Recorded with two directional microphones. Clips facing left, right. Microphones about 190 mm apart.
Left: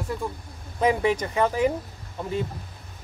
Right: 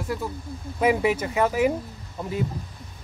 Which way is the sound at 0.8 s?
5° right (ahead or behind).